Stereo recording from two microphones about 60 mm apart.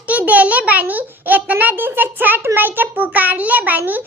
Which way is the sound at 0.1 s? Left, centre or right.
Right.